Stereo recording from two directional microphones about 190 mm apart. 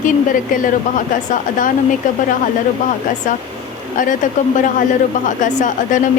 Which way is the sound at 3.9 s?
45° left (ahead or behind).